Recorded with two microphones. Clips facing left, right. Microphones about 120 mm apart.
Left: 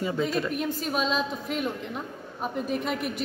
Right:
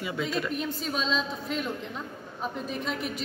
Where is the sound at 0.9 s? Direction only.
55° left (ahead or behind).